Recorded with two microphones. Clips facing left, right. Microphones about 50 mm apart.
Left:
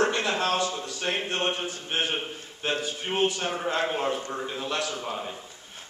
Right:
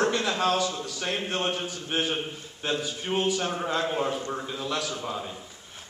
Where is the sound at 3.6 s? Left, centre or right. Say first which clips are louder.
Left 2 dB; left.